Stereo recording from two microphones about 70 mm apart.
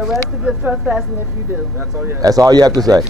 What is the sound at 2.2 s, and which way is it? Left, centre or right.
Speech, right.